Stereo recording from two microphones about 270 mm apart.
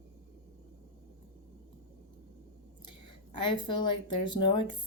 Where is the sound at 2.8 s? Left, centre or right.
Left.